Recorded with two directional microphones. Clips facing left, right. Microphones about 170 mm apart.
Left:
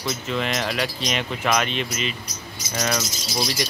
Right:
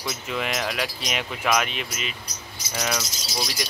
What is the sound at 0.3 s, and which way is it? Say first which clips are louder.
Speech: left 2 dB; 5° right (ahead or behind).